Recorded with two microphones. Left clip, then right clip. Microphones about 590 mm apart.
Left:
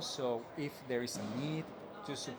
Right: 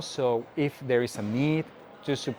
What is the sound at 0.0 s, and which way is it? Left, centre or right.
Speech, right.